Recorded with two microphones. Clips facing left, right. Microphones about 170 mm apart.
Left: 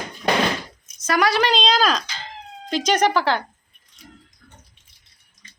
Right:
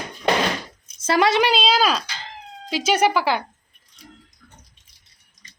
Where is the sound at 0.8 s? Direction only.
30° right (ahead or behind).